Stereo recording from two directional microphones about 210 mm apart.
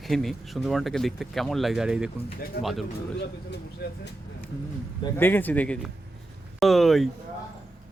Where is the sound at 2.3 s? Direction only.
45° left (ahead or behind).